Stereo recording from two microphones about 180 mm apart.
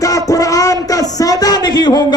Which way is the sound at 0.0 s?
20° left (ahead or behind).